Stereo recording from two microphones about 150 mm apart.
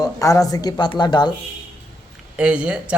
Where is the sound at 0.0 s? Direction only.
20° left (ahead or behind).